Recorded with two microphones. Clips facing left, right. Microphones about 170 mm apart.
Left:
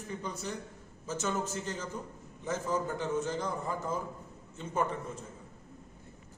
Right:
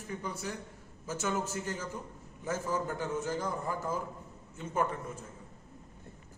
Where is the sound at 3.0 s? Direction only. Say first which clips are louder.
Left 1 dB; 10° right (ahead or behind).